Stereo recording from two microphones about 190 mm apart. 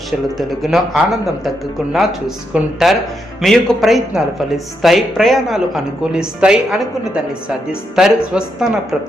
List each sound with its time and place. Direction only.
0.3 s speech: centre (ahead or behind)